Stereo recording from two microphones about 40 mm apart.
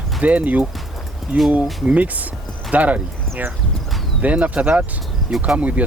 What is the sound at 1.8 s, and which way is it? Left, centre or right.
Speech, right.